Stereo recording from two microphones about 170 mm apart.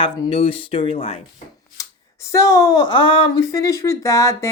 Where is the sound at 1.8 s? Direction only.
20° left (ahead or behind).